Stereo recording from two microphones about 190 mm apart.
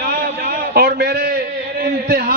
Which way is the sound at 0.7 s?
55° right (ahead or behind).